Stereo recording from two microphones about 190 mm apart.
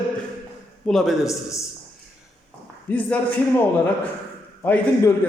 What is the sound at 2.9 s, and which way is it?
Speech, 10° left (ahead or behind).